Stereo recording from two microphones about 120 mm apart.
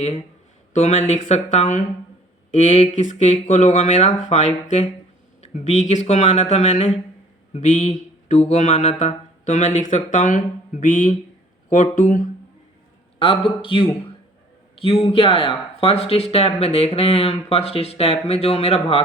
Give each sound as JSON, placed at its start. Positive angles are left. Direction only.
{"t": 0.0, "sound": "speech", "side_deg": 60}
{"t": 0.7, "sound": "speech", "side_deg": 75}
{"t": 2.5, "sound": "mantra", "side_deg": 85}
{"t": 3.4, "sound": "speech", "side_deg": 85}
{"t": 7.5, "sound": "mantra", "side_deg": 75}
{"t": 13.1, "sound": "a man's voice", "side_deg": 50}
{"t": 15.1, "sound": "speech", "side_deg": 50}